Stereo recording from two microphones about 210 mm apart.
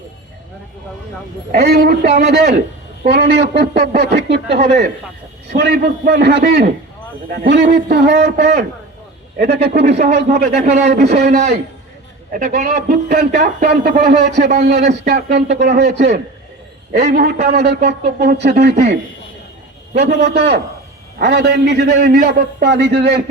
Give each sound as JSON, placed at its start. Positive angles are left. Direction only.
{"t": 1.5, "sound": "a man's voice", "side_deg": -50}
{"t": 9.8, "sound": "a man's voice", "side_deg": -35}
{"t": 17.2, "sound": "a man's voice", "side_deg": -45}
{"t": 20.2, "sound": "a man's voice", "side_deg": -50}